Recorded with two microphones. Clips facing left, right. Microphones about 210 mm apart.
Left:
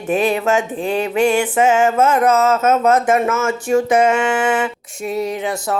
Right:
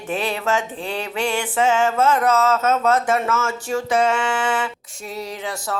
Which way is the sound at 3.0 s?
20° left (ahead or behind).